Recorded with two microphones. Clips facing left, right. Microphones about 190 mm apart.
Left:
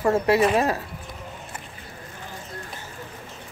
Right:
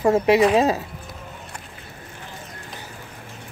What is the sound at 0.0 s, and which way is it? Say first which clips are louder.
Speech: right 3 dB; 15° right (ahead or behind).